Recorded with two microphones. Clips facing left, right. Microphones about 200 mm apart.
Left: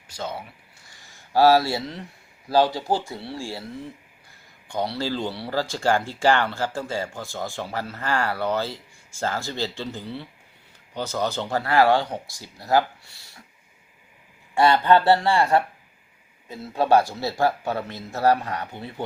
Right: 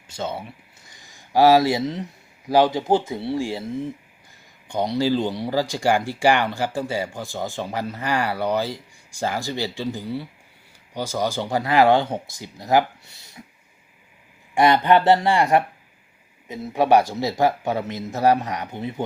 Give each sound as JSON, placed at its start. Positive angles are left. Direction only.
{"t": 0.1, "sound": "speech", "side_deg": -25}
{"t": 14.5, "sound": "speech", "side_deg": -15}